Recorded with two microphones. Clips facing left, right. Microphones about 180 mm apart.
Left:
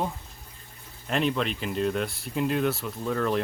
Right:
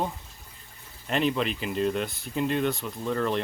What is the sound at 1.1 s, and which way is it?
Speech, centre (ahead or behind).